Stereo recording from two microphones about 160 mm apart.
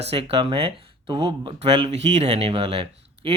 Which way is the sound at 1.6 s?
35° right (ahead or behind).